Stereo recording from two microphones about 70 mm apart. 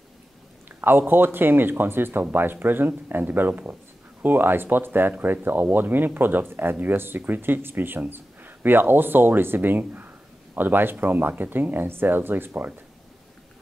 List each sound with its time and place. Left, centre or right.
0.7 s speech: right